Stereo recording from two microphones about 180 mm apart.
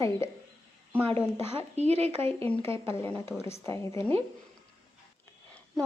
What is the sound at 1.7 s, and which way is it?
Speech, 35° right (ahead or behind).